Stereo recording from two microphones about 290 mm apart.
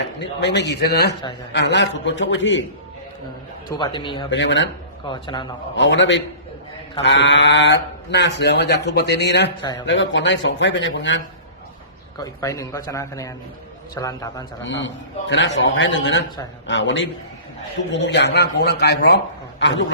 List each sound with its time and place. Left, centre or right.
0.2 s speech: left
3.7 s a man's voice: centre
4.3 s speech: left
5.0 s a man's voice: centre
5.7 s speech: left
12.1 s a man's voice: centre
14.6 s speech: left